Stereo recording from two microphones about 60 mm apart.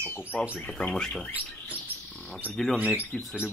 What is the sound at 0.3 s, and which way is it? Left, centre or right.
Speech, centre.